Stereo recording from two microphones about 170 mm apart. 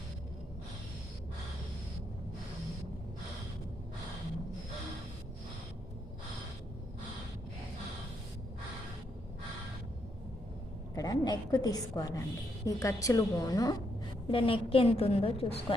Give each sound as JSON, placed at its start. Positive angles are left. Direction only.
{"t": 10.9, "sound": "a woman's voice", "side_deg": 20}